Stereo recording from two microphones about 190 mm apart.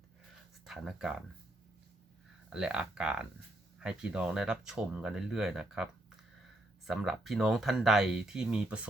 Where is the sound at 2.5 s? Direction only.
5° right (ahead or behind).